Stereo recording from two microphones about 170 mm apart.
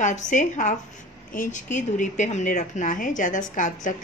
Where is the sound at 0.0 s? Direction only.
45° left (ahead or behind).